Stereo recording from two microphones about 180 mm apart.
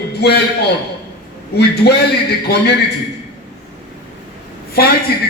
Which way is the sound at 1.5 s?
65° left (ahead or behind).